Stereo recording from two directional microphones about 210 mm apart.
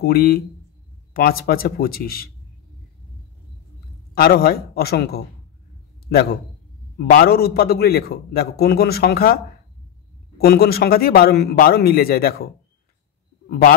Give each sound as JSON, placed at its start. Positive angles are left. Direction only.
{"t": 0.0, "sound": "a man's voice", "side_deg": 45}
{"t": 4.1, "sound": "a man's voice", "side_deg": 45}
{"t": 7.1, "sound": "a man's voice", "side_deg": 45}
{"t": 10.3, "sound": "a man's voice", "side_deg": 50}
{"t": 13.5, "sound": "a man's voice", "side_deg": 45}